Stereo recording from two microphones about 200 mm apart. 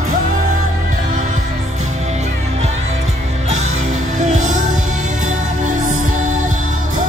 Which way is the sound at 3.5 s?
35° right (ahead or behind).